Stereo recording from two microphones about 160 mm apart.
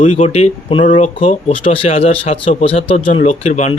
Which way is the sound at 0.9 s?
50° left (ahead or behind).